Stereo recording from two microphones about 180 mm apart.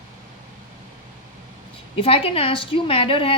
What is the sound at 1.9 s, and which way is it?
A woman's voice, 30° left (ahead or behind).